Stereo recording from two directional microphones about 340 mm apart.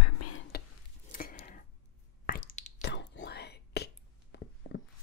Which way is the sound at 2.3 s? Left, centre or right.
Left.